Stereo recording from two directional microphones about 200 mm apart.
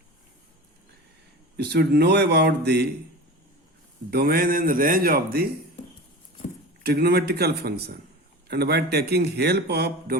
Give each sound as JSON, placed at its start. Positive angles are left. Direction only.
{"t": 1.5, "sound": "speech", "side_deg": -55}
{"t": 4.1, "sound": "a man's voice", "side_deg": -50}
{"t": 6.8, "sound": "a man's voice", "side_deg": -50}